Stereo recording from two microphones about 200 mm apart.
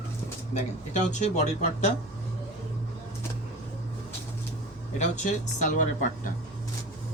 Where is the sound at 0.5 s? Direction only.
35° left (ahead or behind).